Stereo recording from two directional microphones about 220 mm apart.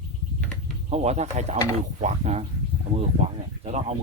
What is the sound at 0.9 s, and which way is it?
A man's voice, 30° right (ahead or behind).